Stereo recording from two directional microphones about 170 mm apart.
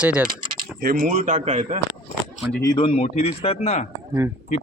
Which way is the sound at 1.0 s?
45° right (ahead or behind).